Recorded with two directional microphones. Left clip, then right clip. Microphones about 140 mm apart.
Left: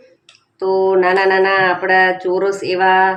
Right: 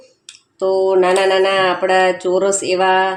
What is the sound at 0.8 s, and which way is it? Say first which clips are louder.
Speech: left 1 dB; 30° right (ahead or behind).